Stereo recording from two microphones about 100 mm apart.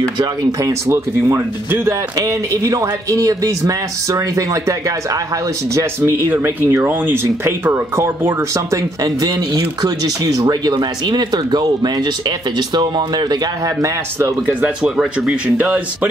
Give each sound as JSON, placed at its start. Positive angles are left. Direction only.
{"t": 0.2, "sound": "speech", "side_deg": -35}
{"t": 5.8, "sound": "speech", "side_deg": -25}
{"t": 8.6, "sound": "speech", "side_deg": -40}
{"t": 14.8, "sound": "speech", "side_deg": -5}